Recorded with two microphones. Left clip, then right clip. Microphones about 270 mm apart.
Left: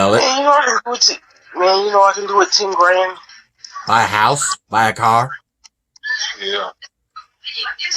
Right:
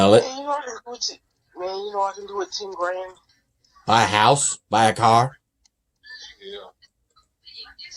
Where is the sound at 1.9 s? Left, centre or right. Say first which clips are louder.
Left 14 dB; left.